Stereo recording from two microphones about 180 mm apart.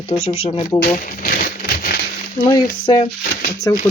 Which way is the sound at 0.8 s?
50° left (ahead or behind).